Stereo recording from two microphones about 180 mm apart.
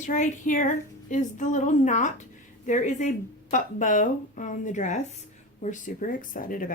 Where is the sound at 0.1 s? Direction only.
45° left (ahead or behind).